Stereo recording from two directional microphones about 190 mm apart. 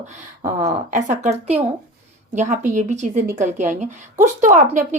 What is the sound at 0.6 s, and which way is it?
Speech, 40° right (ahead or behind).